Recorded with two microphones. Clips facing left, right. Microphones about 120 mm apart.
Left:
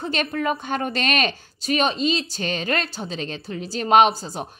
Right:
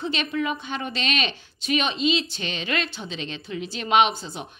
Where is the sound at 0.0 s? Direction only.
45° left (ahead or behind).